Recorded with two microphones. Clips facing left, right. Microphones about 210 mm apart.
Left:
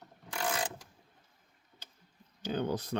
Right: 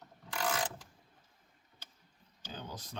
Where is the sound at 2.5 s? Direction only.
65° left (ahead or behind).